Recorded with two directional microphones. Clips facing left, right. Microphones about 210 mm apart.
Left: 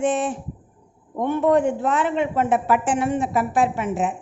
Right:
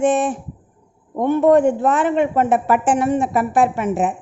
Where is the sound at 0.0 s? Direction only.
50° right (ahead or behind).